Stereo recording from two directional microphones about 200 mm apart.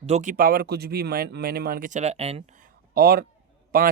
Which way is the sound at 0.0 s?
35° right (ahead or behind).